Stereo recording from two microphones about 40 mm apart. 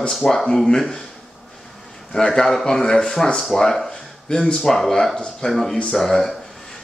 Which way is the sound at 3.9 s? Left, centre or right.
Centre.